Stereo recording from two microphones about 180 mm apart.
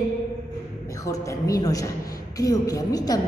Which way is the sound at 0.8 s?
20° left (ahead or behind).